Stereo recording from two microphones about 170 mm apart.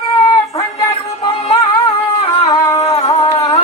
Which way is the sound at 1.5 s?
25° left (ahead or behind).